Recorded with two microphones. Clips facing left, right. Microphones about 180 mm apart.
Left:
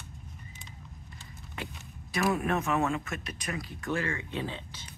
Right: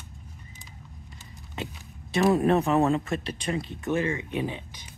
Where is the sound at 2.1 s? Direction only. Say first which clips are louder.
Right 7 dB; 30° right (ahead or behind).